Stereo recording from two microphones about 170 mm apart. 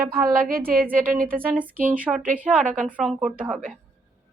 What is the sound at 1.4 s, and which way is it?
Speech, 10° right (ahead or behind).